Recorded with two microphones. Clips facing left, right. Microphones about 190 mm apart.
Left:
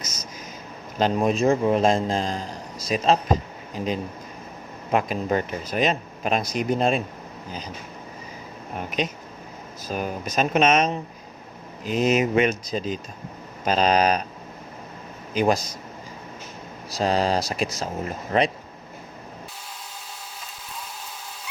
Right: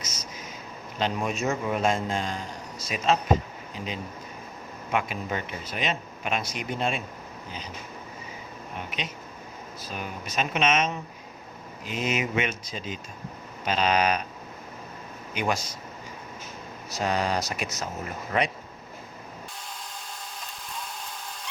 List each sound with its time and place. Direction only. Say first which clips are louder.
0.9 s a man's voice: left 7 dB; 40° left (ahead or behind)
9.0 s a man's voice: left 8 dB; 45° left (ahead or behind)
15.3 s a man's voice: left 7 dB; 35° left (ahead or behind)
17.0 s a man's voice: left 5 dB; 35° left (ahead or behind)